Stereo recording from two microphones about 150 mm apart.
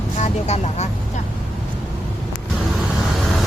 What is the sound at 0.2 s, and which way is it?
Speech, 50° left (ahead or behind).